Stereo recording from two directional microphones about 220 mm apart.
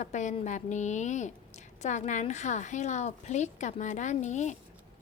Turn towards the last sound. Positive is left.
turn(degrees=30)  # may be behind; listen again after turning